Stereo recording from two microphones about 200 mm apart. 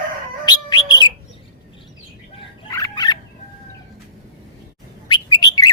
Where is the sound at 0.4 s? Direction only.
20° left (ahead or behind).